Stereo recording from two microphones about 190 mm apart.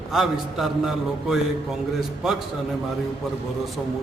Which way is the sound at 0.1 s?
Centre (ahead or behind).